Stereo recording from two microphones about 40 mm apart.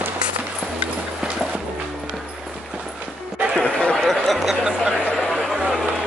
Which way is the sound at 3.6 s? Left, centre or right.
Left.